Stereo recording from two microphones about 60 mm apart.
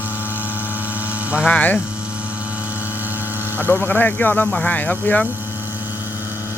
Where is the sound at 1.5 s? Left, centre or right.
Left.